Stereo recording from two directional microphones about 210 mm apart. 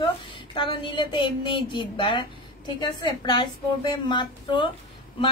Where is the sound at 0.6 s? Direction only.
20° left (ahead or behind).